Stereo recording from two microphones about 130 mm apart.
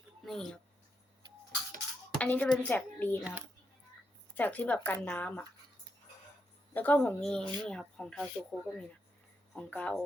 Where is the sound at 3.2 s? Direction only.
10° right (ahead or behind).